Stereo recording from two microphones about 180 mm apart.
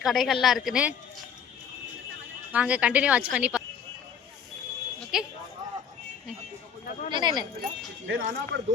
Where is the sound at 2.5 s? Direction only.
5° right (ahead or behind).